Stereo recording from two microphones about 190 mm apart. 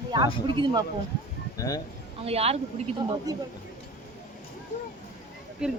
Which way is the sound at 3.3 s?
20° right (ahead or behind).